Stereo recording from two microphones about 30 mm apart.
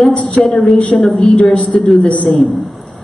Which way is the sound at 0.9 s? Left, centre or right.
Centre.